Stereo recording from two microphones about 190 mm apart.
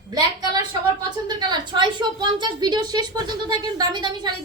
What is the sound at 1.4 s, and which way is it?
A woman's voice, 25° right (ahead or behind).